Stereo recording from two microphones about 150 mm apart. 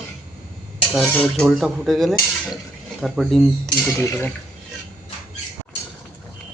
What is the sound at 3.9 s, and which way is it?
Dishes, 15° left (ahead or behind).